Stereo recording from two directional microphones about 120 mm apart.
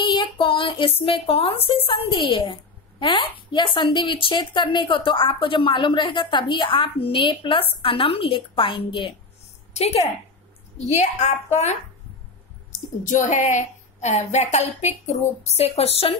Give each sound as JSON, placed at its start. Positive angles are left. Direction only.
{"t": 0.0, "sound": "speech", "side_deg": 40}
{"t": 9.8, "sound": "a woman's voice", "side_deg": 65}
{"t": 12.7, "sound": "a woman's voice", "side_deg": 90}